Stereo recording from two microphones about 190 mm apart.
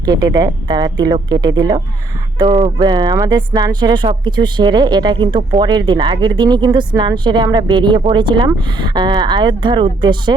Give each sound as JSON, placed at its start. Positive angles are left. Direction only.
{"t": 0.0, "sound": "speech", "side_deg": -20}